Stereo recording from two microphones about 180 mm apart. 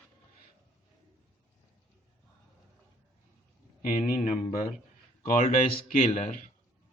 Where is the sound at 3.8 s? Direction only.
45° left (ahead or behind).